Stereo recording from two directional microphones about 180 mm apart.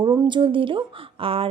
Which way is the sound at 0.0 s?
25° right (ahead or behind).